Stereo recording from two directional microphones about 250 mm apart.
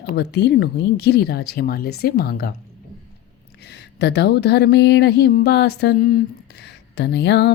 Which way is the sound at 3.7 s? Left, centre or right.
Left.